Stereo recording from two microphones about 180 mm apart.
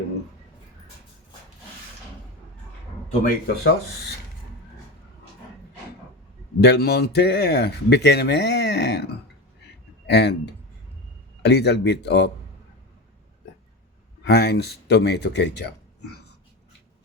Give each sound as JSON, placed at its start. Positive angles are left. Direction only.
{"t": 3.1, "sound": "a man's voice", "side_deg": 55}
{"t": 6.6, "sound": "speech", "side_deg": 65}
{"t": 10.1, "sound": "speech", "side_deg": 70}
{"t": 11.4, "sound": "speech", "side_deg": 70}
{"t": 14.3, "sound": "speech", "side_deg": 65}